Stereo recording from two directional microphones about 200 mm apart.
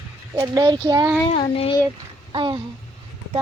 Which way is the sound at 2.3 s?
25° right (ahead or behind).